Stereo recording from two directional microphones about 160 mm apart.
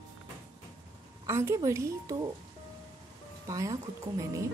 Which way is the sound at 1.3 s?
15° right (ahead or behind).